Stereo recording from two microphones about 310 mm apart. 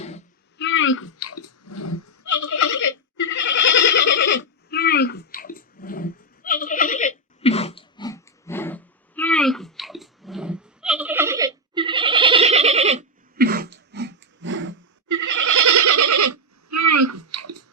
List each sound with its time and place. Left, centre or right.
0.6 s a sound: left
3.2 s neigh: left; by 14.8 s right
15.0 s goat: right